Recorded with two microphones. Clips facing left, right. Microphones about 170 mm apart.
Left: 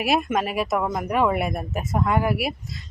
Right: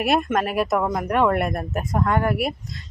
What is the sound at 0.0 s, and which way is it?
Speech, 5° left (ahead or behind).